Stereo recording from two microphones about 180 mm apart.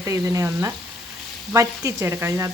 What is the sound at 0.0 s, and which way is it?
Speech, 15° right (ahead or behind).